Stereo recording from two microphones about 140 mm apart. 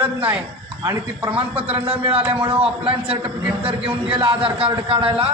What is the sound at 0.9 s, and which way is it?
Speech, 15° right (ahead or behind).